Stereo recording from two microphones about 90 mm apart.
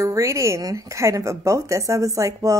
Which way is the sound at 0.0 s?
35° right (ahead or behind).